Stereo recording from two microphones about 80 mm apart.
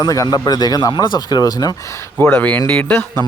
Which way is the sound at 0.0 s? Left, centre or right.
Left.